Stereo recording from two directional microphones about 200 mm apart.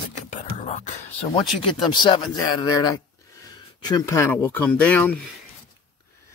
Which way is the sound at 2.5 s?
20° left (ahead or behind).